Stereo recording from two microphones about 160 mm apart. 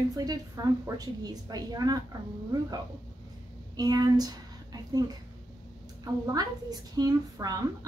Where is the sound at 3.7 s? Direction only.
25° right (ahead or behind).